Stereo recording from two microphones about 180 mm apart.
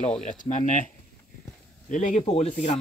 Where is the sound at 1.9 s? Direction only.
45° left (ahead or behind).